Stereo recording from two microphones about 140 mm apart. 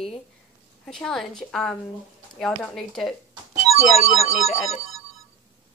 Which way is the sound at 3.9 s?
50° left (ahead or behind).